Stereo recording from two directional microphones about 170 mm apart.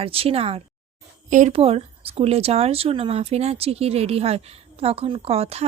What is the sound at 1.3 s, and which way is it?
Speech, 45° right (ahead or behind).